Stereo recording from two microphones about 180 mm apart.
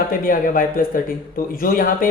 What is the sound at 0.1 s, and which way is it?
Speech, 50° left (ahead or behind).